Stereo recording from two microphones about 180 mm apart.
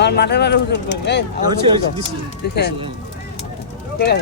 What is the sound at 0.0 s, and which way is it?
Speech, 65° left (ahead or behind).